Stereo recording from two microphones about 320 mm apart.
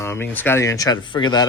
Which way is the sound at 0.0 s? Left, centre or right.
Centre.